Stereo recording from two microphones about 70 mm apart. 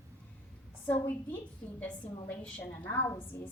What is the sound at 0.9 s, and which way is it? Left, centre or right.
A woman's voice, left.